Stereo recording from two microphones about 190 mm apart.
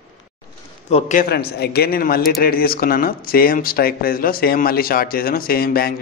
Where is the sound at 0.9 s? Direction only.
35° left (ahead or behind).